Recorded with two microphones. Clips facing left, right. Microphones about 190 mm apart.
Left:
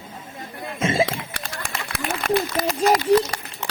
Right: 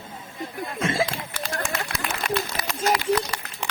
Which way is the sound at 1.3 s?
65° left (ahead or behind).